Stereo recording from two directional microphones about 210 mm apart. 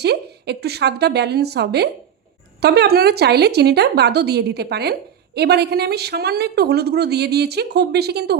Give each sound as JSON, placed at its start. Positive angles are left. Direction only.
{"t": 0.0, "sound": "a woman's voice", "side_deg": -50}